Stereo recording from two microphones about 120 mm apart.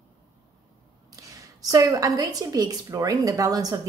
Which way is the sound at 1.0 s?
30° right (ahead or behind).